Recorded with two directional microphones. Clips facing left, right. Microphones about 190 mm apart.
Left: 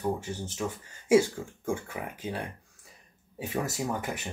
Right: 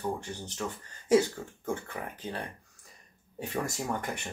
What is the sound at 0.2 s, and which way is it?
Speech, 10° left (ahead or behind).